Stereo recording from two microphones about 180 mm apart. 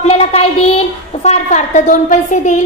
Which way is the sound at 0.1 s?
35° left (ahead or behind).